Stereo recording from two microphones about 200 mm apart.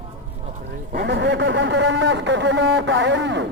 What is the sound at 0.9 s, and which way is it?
A man's voice, 55° right (ahead or behind).